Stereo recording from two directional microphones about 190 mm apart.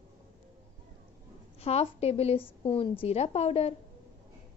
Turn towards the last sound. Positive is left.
turn(degrees=30)  # may be behind; listen again after turning